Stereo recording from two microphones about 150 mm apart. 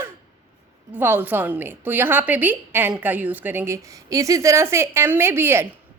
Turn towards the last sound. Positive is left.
turn(degrees=-15)  # may be behind; listen again after turning